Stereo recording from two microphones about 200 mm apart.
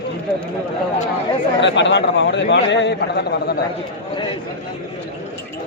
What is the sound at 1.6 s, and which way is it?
A man's voice, 65° left (ahead or behind).